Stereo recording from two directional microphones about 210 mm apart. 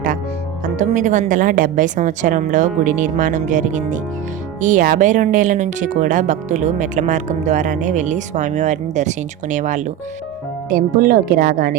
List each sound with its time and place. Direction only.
0.6 s speech: 35° right (ahead or behind)